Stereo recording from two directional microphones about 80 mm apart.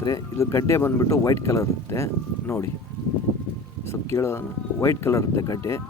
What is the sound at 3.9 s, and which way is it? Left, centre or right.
Speech, left.